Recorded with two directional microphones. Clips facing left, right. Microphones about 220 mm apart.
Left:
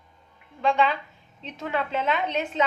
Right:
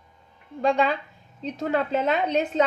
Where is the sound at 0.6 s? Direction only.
40° right (ahead or behind).